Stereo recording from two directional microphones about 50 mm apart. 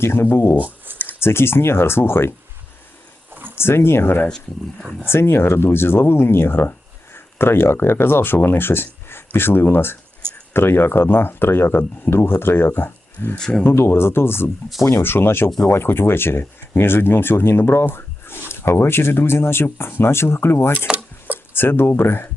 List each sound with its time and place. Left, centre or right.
0.0 s speech: left
0.5 s a sound: right
1.0 s speech: left
3.5 s speech: left